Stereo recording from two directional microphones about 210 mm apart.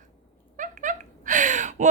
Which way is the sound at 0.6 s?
35° right (ahead or behind).